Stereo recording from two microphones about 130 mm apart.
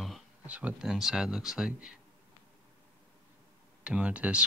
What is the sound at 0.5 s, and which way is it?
Speech, 10° right (ahead or behind).